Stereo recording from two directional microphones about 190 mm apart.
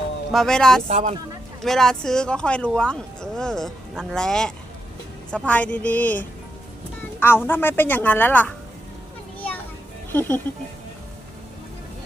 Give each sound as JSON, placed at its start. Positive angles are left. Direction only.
{"t": 0.3, "sound": "speech", "side_deg": 0}
{"t": 0.9, "sound": "speech", "side_deg": -35}
{"t": 1.6, "sound": "a woman's voice", "side_deg": 0}
{"t": 10.1, "sound": "speech", "side_deg": 10}